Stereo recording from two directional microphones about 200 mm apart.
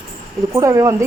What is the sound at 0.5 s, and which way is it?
Speech, 15° right (ahead or behind).